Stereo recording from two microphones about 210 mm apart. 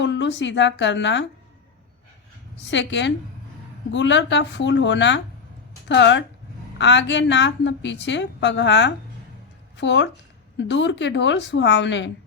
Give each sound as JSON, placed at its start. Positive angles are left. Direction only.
{"t": 0.0, "sound": "speech", "side_deg": 60}
{"t": 2.6, "sound": "a woman's voice", "side_deg": 60}